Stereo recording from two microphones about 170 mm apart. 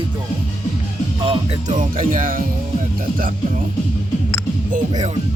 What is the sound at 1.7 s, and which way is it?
Music, 50° right (ahead or behind).